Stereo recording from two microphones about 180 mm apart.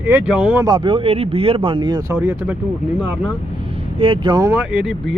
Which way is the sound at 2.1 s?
10° right (ahead or behind).